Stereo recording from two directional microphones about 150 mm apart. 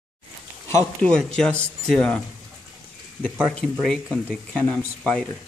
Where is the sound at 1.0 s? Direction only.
5° left (ahead or behind).